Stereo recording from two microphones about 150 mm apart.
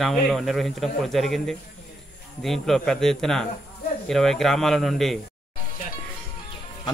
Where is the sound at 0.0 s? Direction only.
Centre (ahead or behind).